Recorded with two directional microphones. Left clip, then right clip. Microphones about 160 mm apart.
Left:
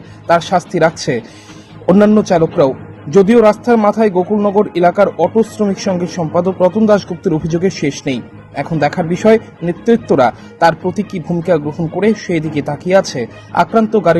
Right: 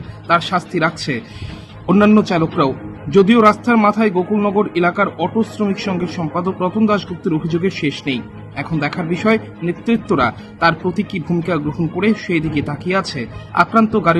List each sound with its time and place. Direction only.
0.3 s speech: 15° left (ahead or behind)